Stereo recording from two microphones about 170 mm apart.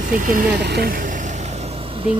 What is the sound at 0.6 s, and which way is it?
Vehicle, 75° right (ahead or behind).